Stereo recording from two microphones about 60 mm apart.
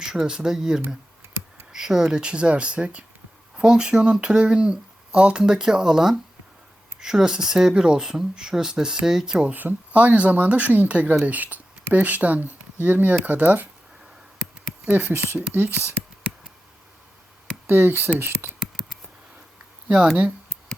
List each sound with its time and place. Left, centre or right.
0.0 s speech: centre
9.5 s speech: right
14.8 s speech: right
17.7 s speech: right
18.4 s a sound: right